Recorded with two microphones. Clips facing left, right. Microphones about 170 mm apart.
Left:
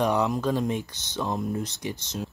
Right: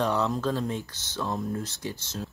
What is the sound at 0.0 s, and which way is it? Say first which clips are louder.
Speech: left 2 dB; 15° left (ahead or behind).